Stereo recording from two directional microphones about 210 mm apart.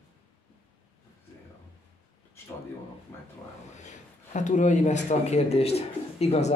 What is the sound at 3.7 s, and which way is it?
Speech, 35° left (ahead or behind).